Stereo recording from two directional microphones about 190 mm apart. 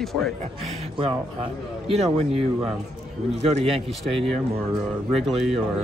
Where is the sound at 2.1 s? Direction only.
30° right (ahead or behind).